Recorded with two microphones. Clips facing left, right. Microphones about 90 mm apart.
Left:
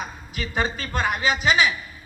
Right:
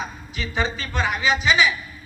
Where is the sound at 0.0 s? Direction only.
45° left (ahead or behind).